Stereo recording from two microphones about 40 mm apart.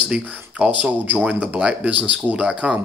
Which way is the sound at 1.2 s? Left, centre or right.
Right.